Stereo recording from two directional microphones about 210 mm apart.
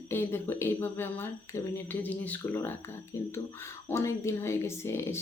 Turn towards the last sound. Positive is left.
turn(degrees=10)  # may be behind; listen again after turning